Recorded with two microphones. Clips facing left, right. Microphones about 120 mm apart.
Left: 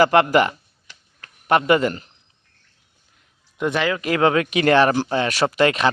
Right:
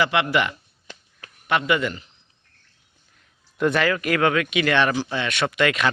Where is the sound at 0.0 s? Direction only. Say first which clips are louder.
Left 6 dB; 40° left (ahead or behind).